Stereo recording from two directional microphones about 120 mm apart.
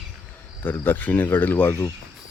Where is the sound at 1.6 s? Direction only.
30° left (ahead or behind).